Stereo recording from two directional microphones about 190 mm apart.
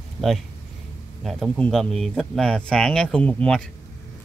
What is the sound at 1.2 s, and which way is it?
Speech, centre (ahead or behind).